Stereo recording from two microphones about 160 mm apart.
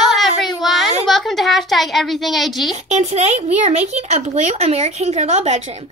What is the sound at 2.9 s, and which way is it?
Speech, 40° right (ahead or behind).